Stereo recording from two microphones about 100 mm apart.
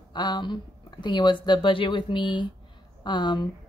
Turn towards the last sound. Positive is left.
turn(degrees=50)  # may be behind; listen again after turning